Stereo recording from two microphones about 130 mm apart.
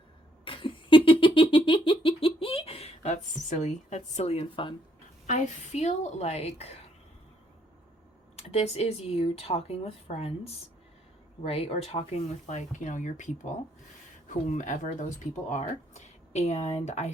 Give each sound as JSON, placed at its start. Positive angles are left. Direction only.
{"t": 0.4, "sound": "a sound", "side_deg": 40}
{"t": 5.2, "sound": "speech", "side_deg": 65}
{"t": 8.4, "sound": "speech", "side_deg": 50}